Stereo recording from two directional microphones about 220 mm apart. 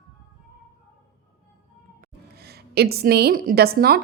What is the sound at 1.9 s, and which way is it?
A woman's voice, 45° right (ahead or behind).